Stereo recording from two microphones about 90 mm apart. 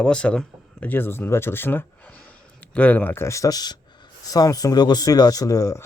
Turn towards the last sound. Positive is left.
turn(degrees=35)  # may be behind; listen again after turning